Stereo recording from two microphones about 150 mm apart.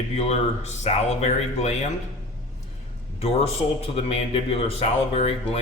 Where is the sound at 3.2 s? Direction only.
45° left (ahead or behind).